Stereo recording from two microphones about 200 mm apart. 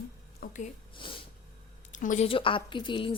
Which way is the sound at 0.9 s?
25° left (ahead or behind).